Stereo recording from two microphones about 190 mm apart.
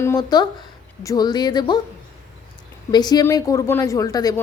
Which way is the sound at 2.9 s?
20° left (ahead or behind).